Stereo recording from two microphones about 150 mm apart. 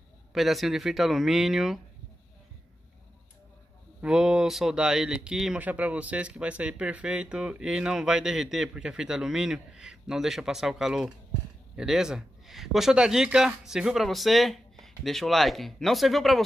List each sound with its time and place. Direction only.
0.3 s speech: centre (ahead or behind)
4.0 s speech: 5° right (ahead or behind)